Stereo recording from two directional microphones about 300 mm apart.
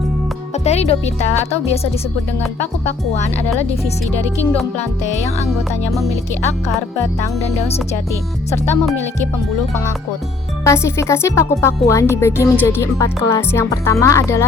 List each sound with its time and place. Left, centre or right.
0.5 s speech: left
2.4 s speech: centre
4.8 s speech: left
5.5 s music: centre
8.6 s speech: centre
10.7 s speech: centre